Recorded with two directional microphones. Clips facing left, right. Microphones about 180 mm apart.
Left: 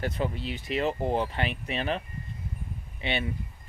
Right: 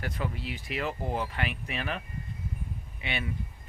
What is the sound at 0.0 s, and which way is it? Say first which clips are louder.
Speech: left 4 dB; 25° left (ahead or behind).